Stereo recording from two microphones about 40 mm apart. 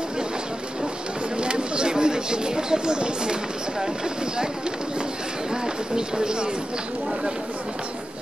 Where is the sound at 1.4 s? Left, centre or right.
Right.